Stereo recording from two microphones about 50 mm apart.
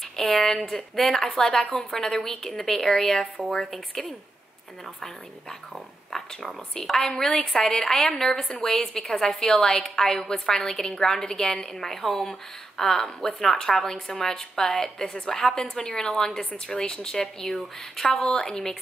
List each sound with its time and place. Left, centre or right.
0.1 s a woman's voice: centre
6.1 s a woman's voice: centre